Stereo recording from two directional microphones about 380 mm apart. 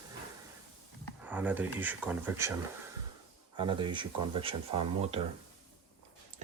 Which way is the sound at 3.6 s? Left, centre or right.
Centre.